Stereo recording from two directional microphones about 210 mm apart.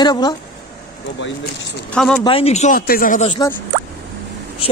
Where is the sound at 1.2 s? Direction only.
55° left (ahead or behind).